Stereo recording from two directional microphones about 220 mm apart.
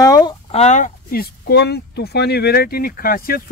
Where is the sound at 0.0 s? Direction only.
20° left (ahead or behind).